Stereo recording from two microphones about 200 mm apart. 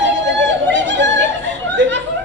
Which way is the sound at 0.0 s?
65° right (ahead or behind).